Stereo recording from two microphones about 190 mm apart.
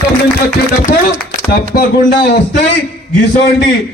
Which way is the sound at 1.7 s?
55° left (ahead or behind).